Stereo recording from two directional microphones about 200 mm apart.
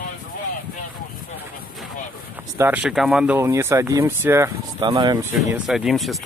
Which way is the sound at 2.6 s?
10° right (ahead or behind).